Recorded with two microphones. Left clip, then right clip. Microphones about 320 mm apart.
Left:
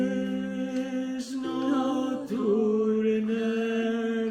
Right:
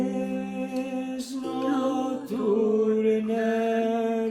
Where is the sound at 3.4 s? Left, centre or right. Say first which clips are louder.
Right 4 dB; right.